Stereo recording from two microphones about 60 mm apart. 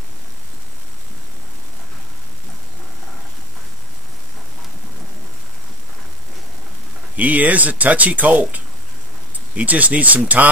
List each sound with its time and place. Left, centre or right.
7.2 s speech: right